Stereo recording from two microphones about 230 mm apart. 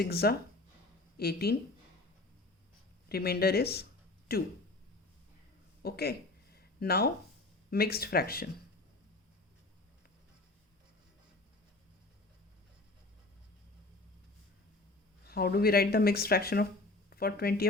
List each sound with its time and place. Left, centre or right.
0.0 s speech: left
3.1 s speech: left
5.8 s a sound: left
7.7 s speech: left
15.3 s speech: left